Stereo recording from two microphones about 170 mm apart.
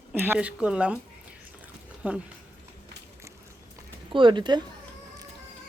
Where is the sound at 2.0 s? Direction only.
10° right (ahead or behind).